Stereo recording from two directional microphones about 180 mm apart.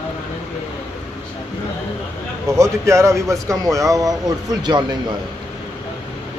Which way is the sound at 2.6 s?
15° right (ahead or behind).